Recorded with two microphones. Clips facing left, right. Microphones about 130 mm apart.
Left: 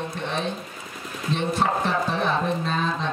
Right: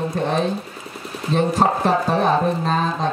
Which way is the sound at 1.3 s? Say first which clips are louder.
Right 6 dB; 40° right (ahead or behind).